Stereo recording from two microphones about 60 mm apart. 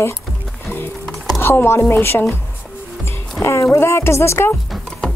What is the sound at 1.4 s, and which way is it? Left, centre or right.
Speech, left.